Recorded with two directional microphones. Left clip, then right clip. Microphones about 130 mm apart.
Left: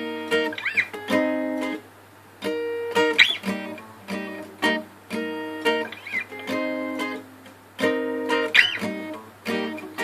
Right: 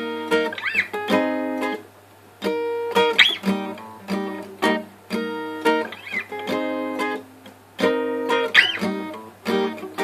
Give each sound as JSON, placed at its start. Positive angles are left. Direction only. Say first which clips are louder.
{"t": 0.0, "sound": "music", "louder": "right 2 dB", "side_deg": -40}